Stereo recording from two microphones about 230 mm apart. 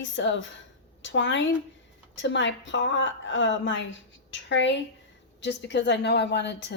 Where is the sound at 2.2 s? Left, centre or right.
Left.